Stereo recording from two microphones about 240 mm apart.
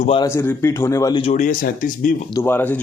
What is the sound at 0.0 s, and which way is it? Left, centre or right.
Speech, left.